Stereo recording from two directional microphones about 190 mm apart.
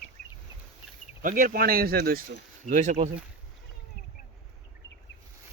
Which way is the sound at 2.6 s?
40° right (ahead or behind).